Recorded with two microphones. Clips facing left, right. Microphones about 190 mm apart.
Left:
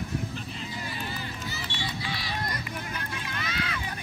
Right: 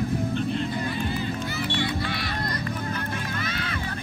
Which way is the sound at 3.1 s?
50° right (ahead or behind).